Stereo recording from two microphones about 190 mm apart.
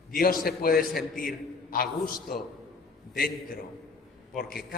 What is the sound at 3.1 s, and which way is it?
Speech, 50° left (ahead or behind).